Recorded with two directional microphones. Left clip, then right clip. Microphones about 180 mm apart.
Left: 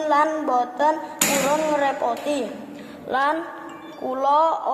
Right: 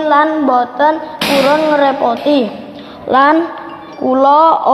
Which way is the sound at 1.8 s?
25° right (ahead or behind).